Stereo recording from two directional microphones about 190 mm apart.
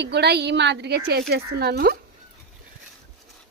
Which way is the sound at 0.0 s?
60° right (ahead or behind).